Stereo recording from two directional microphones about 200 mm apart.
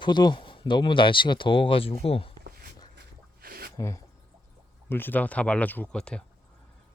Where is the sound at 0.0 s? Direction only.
20° left (ahead or behind).